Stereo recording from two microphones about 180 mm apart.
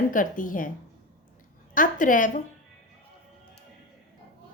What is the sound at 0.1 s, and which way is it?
Speech, 50° left (ahead or behind).